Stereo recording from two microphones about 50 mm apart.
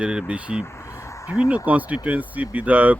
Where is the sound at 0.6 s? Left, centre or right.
Left.